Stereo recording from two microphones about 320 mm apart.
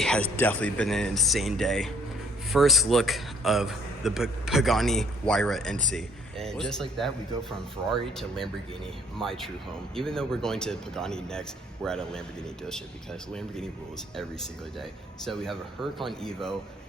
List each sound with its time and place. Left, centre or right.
0.0 s a man's voice: centre
8.1 s a man's voice: centre
14.2 s a man's voice: centre